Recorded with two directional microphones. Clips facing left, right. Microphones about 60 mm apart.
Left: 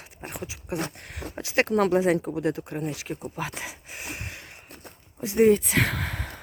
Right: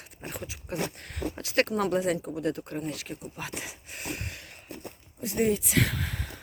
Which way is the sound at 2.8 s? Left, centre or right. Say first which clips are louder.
Left 4 dB; left.